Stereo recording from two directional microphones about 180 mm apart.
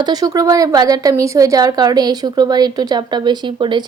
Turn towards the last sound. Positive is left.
turn(degrees=-25)  # may be behind; listen again after turning